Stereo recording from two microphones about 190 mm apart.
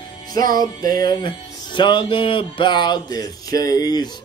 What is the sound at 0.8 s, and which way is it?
Speech, 20° left (ahead or behind).